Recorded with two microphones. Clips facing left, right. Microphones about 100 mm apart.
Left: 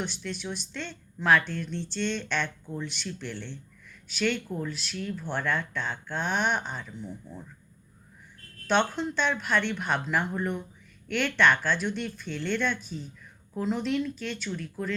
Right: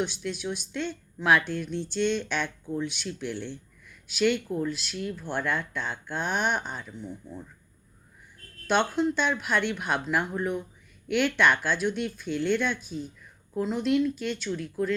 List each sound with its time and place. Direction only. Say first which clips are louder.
0.0 s a woman's voice: right 4 dB; 5° right (ahead or behind)
8.6 s a woman's voice: right 1 dB; 5° right (ahead or behind)